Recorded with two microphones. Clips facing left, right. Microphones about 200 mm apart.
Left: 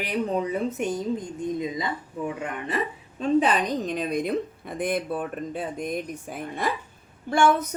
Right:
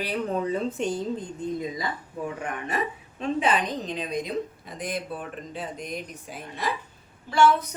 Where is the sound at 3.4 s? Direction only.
50° left (ahead or behind).